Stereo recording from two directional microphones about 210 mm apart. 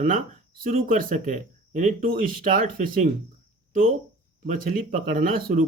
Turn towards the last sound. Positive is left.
turn(degrees=-40)  # may be behind; listen again after turning